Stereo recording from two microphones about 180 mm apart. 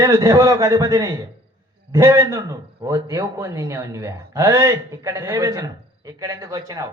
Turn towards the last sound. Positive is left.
turn(degrees=-20)  # may be behind; listen again after turning